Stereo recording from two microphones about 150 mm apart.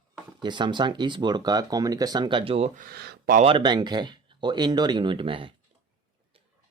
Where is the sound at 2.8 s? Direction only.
90° right.